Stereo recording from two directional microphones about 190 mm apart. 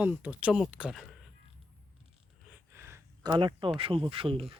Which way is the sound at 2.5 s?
15° right (ahead or behind).